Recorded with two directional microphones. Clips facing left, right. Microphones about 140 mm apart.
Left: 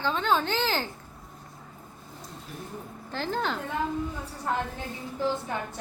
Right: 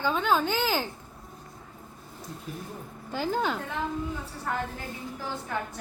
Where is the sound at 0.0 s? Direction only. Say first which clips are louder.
Right 1 dB; 10° right (ahead or behind).